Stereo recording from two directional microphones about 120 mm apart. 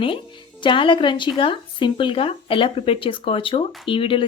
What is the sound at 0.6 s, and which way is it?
Speech, 45° left (ahead or behind).